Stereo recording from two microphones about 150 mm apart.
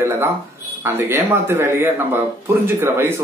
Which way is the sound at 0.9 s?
15° right (ahead or behind).